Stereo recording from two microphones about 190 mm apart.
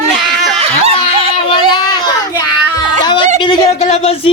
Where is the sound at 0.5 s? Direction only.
30° right (ahead or behind).